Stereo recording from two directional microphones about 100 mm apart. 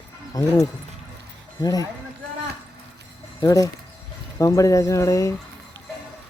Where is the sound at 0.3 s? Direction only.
35° left (ahead or behind).